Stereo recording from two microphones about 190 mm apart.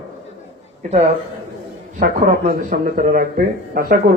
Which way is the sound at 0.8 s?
35° right (ahead or behind).